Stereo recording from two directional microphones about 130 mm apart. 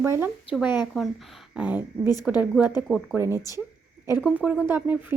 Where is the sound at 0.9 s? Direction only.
Centre (ahead or behind).